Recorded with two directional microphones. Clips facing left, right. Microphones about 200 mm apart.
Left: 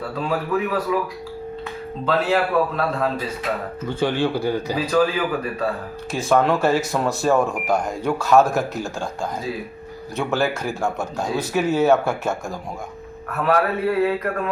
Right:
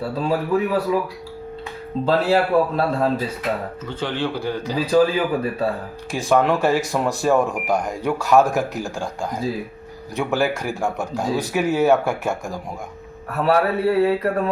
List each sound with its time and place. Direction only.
0.2 s speech: 30° right (ahead or behind)
2.0 s speech: 35° right (ahead or behind)
3.8 s speech: 10° left (ahead or behind)
4.9 s speech: 25° right (ahead or behind)
6.1 s speech: 15° right (ahead or behind)
10.2 s speech: 15° right (ahead or behind)
13.3 s speech: 30° right (ahead or behind)